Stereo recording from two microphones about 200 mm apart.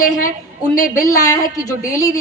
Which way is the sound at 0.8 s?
15° left (ahead or behind).